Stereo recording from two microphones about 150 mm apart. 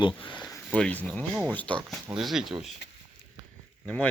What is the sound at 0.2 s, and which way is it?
Speech, 35° left (ahead or behind).